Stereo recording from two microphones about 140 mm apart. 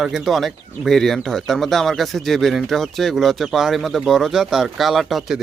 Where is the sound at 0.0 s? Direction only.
Centre (ahead or behind).